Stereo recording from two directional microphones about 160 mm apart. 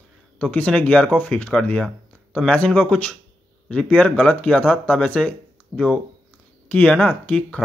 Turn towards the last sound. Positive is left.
turn(degrees=10)  # may be behind; listen again after turning